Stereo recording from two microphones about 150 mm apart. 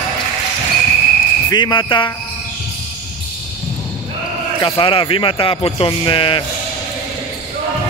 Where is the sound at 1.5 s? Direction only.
30° left (ahead or behind).